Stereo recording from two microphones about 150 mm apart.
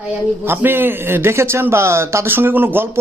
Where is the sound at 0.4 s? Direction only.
15° right (ahead or behind).